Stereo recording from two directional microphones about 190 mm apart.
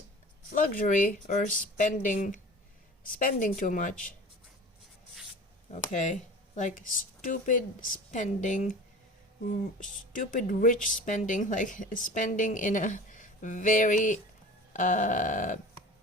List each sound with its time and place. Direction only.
0.5 s speech: 45° left (ahead or behind)
5.9 s a woman's voice: 40° left (ahead or behind)
10.1 s a woman's voice: 45° left (ahead or behind)